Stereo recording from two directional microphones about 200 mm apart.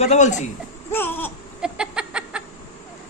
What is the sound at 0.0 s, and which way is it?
Speech, 35° left (ahead or behind).